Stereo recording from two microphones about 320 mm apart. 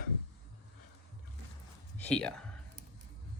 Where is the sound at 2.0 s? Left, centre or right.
Centre.